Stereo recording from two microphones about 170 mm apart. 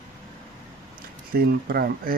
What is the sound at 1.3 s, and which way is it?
Speech, 65° right (ahead or behind).